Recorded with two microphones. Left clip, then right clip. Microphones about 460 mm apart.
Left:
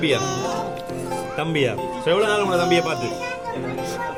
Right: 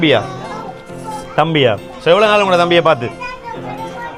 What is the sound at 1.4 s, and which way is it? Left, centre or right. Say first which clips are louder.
A man's voice: right 11 dB; right.